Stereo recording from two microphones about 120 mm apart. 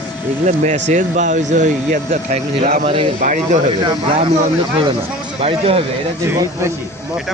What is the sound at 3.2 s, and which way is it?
Speech, 90° right.